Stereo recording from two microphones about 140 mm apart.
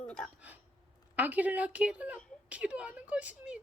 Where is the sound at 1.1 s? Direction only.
10° right (ahead or behind).